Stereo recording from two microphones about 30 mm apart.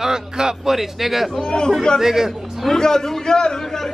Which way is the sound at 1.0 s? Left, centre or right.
Centre.